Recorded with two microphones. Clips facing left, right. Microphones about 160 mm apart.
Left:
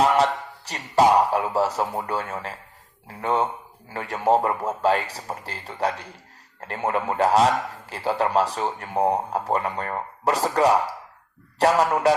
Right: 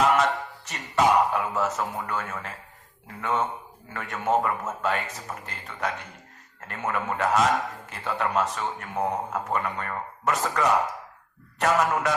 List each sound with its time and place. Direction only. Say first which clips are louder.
0.0 s a man's voice: left 2 dB; 35° left (ahead or behind)